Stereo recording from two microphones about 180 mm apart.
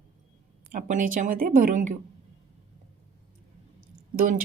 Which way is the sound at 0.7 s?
45° right (ahead or behind).